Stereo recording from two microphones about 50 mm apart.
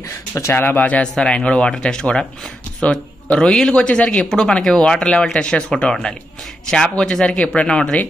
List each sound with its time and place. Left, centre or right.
0.5 s speech: left; by 3.7 s centre
3.7 s speech: left